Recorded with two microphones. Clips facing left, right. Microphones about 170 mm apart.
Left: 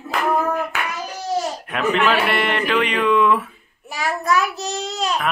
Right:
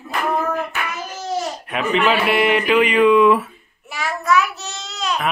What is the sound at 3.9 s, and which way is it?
Child singing, 35° left (ahead or behind).